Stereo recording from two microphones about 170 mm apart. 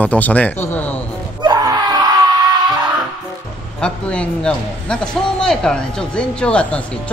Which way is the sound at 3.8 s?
5° left (ahead or behind).